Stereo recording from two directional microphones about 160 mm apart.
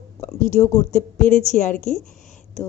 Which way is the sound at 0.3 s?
50° left (ahead or behind).